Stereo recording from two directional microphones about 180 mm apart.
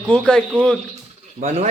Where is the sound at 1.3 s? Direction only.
40° right (ahead or behind).